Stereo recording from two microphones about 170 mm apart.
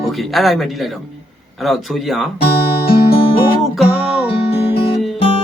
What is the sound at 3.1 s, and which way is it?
Music, 30° left (ahead or behind).